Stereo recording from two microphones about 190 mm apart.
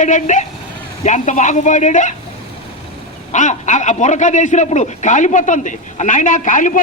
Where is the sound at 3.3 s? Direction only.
40° left (ahead or behind).